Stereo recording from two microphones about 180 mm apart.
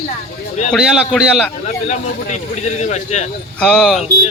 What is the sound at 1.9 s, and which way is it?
Speech, 40° left (ahead or behind).